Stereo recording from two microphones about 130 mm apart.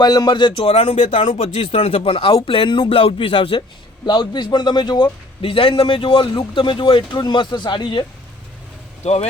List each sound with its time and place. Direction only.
0.0 s speech: 30° left (ahead or behind); by 1.9 s 55° left (ahead or behind)
2.0 s speech: 40° left (ahead or behind)